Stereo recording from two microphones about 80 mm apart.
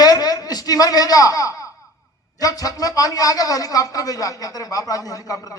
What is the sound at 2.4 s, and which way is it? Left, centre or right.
Speech, left.